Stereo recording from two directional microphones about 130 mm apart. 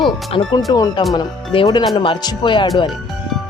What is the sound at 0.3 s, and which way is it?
Speech, 40° left (ahead or behind).